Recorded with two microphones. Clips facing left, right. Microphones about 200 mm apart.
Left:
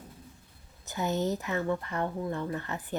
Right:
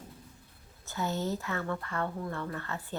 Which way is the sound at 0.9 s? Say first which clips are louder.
Left 3 dB; 20° left (ahead or behind).